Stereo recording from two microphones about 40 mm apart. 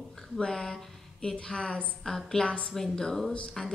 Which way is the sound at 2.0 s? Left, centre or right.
Centre.